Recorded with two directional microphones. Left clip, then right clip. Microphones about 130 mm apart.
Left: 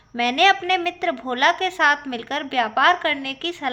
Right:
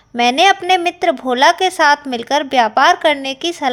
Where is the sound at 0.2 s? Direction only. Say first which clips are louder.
Right 5 dB; 55° right (ahead or behind).